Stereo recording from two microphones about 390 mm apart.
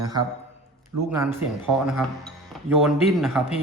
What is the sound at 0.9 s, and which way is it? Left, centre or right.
Speech, right.